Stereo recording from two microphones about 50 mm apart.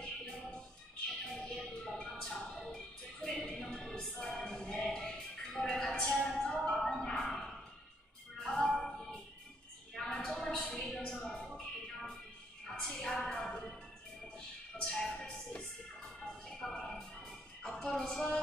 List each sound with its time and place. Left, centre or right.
0.0 s music: centre
2.0 s music: centre
9.9 s a sound: centre
12.6 s music: centre
14.8 s music: centre